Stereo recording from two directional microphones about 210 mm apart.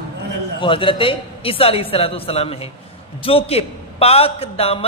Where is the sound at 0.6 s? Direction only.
25° left (ahead or behind).